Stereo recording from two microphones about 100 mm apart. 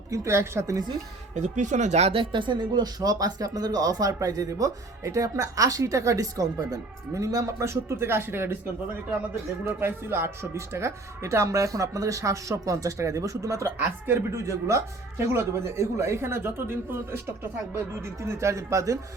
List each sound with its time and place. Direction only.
0.1 s speech: 25° right (ahead or behind)
2.0 s speech: 70° right (ahead or behind); by 8.5 s 25° right (ahead or behind)
9.6 s speech: 25° right (ahead or behind)